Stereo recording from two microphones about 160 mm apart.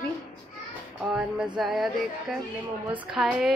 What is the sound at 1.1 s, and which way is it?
Speech, 10° right (ahead or behind).